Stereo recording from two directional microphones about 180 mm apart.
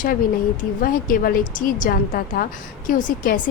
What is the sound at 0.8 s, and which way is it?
A woman's voice, 50° left (ahead or behind).